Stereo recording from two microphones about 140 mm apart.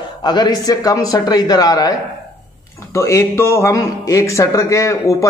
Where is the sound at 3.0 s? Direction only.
20° left (ahead or behind).